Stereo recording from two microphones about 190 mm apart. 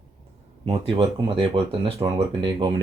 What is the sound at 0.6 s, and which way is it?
Speech, 30° right (ahead or behind).